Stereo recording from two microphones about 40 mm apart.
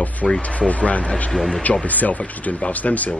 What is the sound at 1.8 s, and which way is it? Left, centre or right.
Speech, left.